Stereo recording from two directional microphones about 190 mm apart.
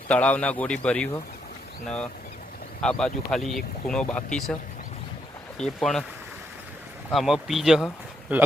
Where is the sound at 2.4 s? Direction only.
50° left (ahead or behind).